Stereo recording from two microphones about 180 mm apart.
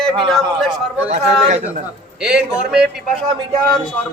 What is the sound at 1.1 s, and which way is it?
Speech, 40° right (ahead or behind).